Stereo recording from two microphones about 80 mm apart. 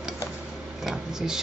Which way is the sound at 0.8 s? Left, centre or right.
Centre.